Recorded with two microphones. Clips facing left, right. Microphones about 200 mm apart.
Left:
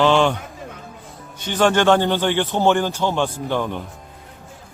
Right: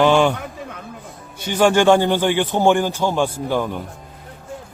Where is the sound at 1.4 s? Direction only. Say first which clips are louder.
Right 2 dB; 10° right (ahead or behind).